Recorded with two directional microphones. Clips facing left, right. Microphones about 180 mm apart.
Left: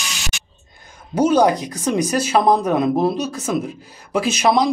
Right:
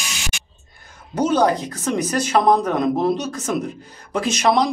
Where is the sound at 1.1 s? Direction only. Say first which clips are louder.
Left 3 dB; 10° left (ahead or behind).